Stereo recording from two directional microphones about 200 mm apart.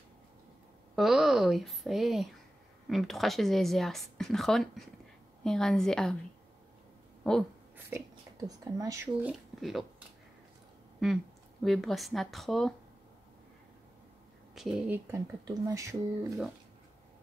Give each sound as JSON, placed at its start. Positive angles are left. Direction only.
{"t": 0.9, "sound": "speech", "side_deg": 0}
{"t": 7.2, "sound": "speech", "side_deg": 5}
{"t": 8.5, "sound": "speech", "side_deg": -15}
{"t": 14.5, "sound": "a woman's voice", "side_deg": 0}
{"t": 15.0, "sound": "speech", "side_deg": -15}